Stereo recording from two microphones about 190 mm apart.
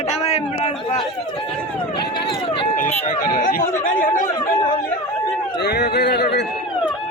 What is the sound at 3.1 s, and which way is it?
Speech, 45° left (ahead or behind).